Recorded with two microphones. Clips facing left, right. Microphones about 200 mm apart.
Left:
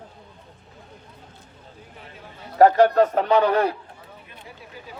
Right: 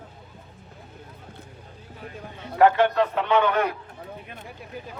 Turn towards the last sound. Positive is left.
turn(degrees=35)  # may be behind; listen again after turning